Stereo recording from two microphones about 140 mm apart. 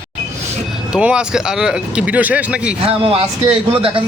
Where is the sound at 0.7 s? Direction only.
5° right (ahead or behind).